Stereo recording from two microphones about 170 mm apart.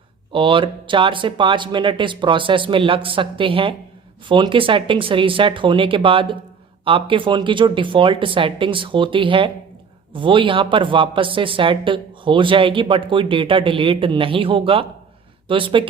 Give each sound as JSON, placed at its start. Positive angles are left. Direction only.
{"t": 0.3, "sound": "speech", "side_deg": -30}